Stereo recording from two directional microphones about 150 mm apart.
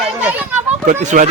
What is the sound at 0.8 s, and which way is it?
Speech, 55° right (ahead or behind).